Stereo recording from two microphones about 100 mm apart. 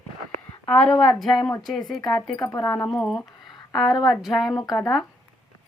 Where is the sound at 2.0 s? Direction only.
45° left (ahead or behind).